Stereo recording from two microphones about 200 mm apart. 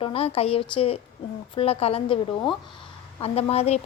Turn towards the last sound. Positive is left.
turn(degrees=30)  # may be behind; listen again after turning